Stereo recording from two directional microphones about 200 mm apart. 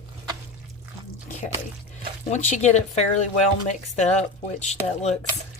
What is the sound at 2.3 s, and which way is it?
Speech, 35° left (ahead or behind).